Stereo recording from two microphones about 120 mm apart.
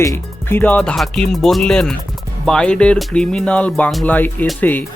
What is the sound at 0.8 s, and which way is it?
Music, centre (ahead or behind).